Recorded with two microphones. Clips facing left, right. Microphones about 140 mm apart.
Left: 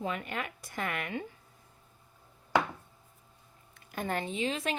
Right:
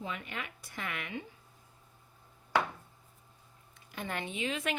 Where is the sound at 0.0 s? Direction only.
50° left (ahead or behind).